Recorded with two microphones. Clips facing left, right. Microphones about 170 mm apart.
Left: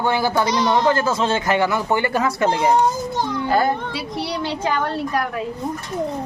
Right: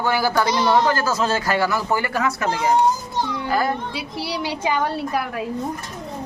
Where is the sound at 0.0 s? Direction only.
25° left (ahead or behind).